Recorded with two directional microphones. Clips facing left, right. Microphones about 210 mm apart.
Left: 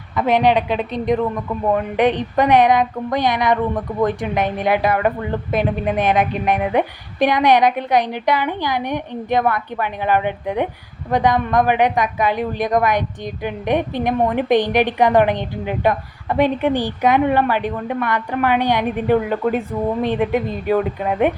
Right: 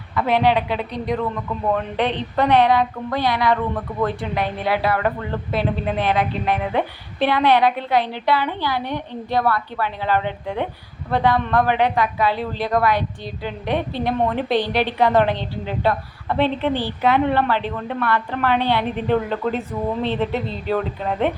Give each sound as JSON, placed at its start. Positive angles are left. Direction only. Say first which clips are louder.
{"t": 0.2, "sound": "a woman's voice", "louder": "left 2 dB", "side_deg": 20}